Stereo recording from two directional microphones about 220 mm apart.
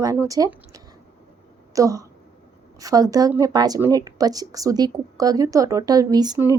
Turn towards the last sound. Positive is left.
turn(degrees=-15)  # may be behind; listen again after turning